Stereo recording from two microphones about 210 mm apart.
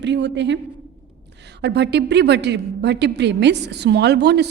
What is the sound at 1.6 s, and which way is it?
A woman's voice, 55° right (ahead or behind).